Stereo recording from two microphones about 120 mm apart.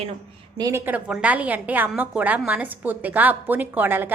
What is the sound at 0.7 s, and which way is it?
A woman's voice, 15° right (ahead or behind).